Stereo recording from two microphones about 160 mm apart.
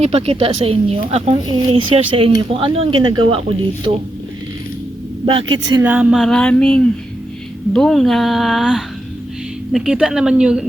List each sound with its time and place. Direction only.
0.0 s a woman's voice: 40° right (ahead or behind)
5.2 s a woman's voice: 30° right (ahead or behind)
5.8 s speech: 10° right (ahead or behind)